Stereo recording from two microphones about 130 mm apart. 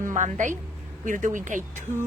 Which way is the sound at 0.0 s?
70° right (ahead or behind).